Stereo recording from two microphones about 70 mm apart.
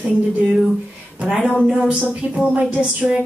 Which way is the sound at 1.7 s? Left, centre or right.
Centre.